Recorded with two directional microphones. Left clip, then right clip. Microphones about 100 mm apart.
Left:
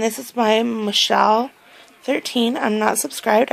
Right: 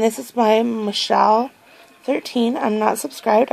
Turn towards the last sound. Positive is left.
turn(degrees=-10)  # may be behind; listen again after turning